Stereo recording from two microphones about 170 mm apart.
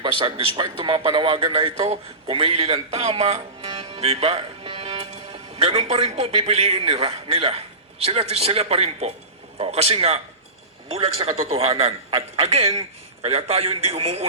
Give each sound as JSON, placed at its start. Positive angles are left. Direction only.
{"t": 0.0, "sound": "a man's voice", "side_deg": -30}
{"t": 4.0, "sound": "music", "side_deg": -35}
{"t": 5.9, "sound": "a man's voice", "side_deg": -40}